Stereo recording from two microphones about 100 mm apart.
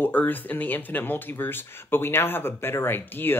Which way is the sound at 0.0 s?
20° left (ahead or behind).